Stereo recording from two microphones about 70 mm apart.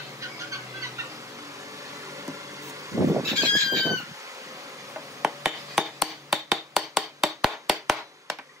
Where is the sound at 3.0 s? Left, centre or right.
Right.